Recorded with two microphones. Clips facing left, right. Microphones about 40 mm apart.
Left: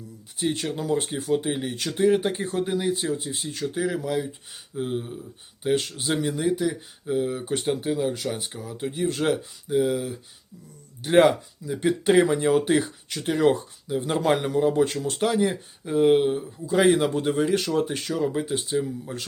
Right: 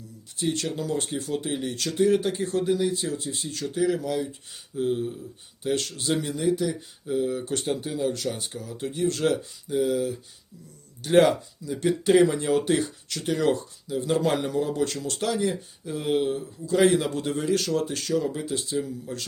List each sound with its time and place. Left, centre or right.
0.3 s speech: centre